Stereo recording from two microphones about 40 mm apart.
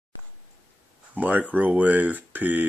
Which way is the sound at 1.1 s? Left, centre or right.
Right.